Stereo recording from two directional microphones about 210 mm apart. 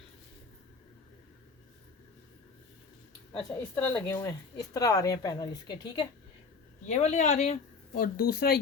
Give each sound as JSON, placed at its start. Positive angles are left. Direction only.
{"t": 3.3, "sound": "speech", "side_deg": 5}
{"t": 6.8, "sound": "speech", "side_deg": 35}